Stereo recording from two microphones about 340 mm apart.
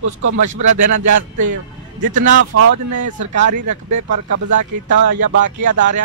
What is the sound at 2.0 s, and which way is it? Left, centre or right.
Speech, right.